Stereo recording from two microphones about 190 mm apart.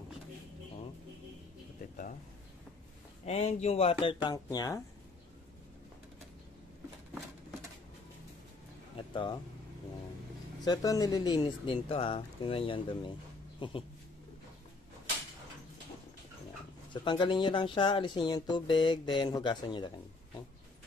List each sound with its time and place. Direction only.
3.3 s speech: 35° left (ahead or behind); by 4.8 s 20° left (ahead or behind)
8.9 s a sound: 25° left (ahead or behind)
10.6 s speech: 20° left (ahead or behind)
16.9 s speech: 25° left (ahead or behind)